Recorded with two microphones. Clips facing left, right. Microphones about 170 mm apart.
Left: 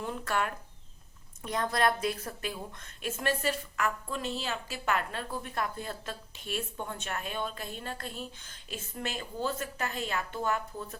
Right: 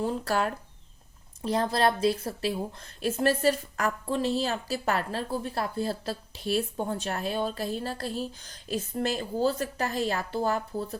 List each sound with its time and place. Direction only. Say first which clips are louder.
0.0 s a woman's voice: right 5 dB; 35° right (ahead or behind)